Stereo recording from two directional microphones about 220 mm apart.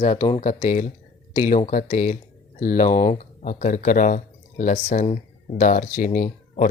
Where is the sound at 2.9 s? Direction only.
20° left (ahead or behind).